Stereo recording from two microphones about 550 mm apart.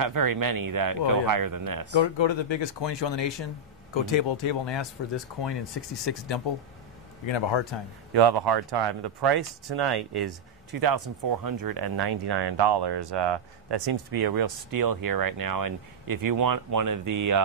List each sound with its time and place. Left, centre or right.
0.0 s speech: right
2.1 s speech: left
8.1 s speech: right